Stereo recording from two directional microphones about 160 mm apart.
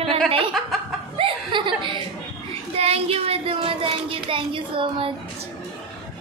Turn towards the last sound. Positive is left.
turn(degrees=-35)  # may be behind; listen again after turning